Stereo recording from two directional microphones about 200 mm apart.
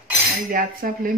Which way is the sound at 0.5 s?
45° right (ahead or behind).